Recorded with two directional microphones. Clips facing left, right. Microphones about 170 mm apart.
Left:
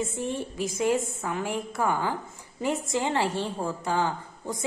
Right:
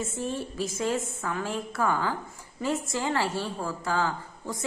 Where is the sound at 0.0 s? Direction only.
15° left (ahead or behind).